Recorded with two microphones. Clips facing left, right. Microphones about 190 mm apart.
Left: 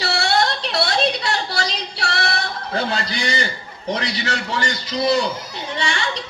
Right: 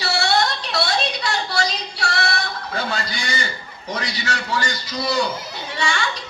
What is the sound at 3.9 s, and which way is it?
A man's voice, 30° left (ahead or behind).